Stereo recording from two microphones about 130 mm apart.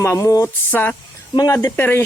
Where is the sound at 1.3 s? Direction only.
25° left (ahead or behind).